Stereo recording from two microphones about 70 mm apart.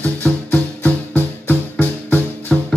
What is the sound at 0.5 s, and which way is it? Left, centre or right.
Music, left.